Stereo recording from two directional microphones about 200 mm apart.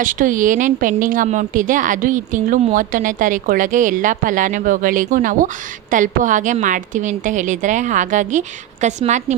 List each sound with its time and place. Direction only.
0.0 s speech: 40° right (ahead or behind)